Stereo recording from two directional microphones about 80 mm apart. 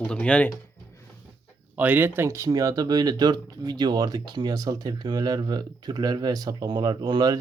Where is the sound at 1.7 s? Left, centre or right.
Right.